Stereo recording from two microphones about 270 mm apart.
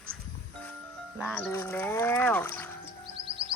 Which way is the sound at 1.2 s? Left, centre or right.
Centre.